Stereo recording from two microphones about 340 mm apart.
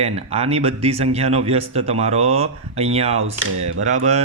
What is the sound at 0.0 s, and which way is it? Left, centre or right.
A man's voice, centre.